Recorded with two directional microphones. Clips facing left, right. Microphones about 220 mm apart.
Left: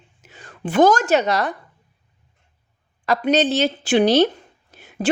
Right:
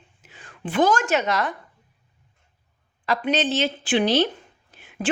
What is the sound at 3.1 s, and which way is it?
Speech, 40° left (ahead or behind).